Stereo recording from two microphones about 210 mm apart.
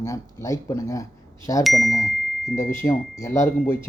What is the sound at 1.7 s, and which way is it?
Speech, centre (ahead or behind).